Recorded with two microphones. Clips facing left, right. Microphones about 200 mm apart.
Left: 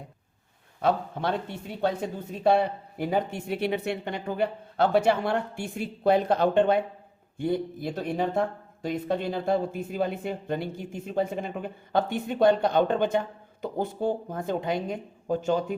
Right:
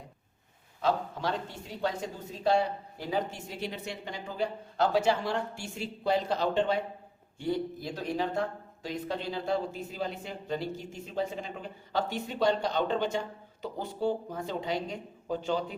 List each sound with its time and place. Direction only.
0.8 s speech: 55° left (ahead or behind)